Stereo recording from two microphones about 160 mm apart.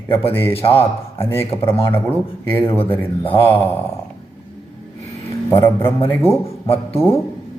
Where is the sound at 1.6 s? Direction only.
15° left (ahead or behind).